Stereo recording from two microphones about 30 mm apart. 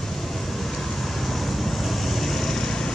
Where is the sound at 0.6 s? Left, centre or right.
Centre.